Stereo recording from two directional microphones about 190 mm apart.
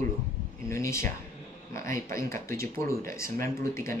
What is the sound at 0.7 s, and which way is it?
A man's voice, 15° left (ahead or behind).